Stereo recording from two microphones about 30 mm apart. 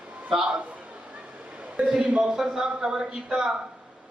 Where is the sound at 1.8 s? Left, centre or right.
Right.